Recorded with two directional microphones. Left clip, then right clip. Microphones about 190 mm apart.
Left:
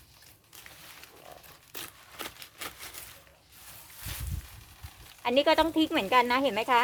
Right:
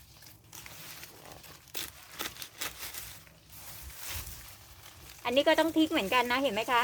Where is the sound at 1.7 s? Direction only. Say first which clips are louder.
Right 2 dB; centre (ahead or behind).